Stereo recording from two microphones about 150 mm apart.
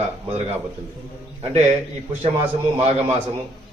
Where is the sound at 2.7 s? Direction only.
45° right (ahead or behind).